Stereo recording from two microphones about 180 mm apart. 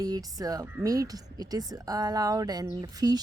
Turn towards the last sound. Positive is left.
turn(degrees=-20)  # may be behind; listen again after turning